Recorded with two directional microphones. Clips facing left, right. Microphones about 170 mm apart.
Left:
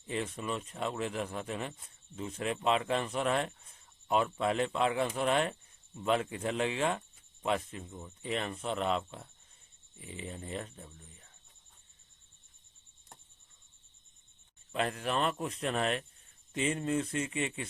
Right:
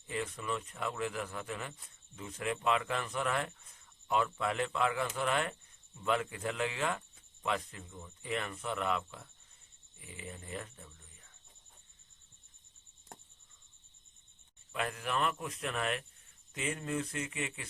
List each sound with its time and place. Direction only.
0.1 s speech: 20° left (ahead or behind)
14.7 s speech: 30° left (ahead or behind)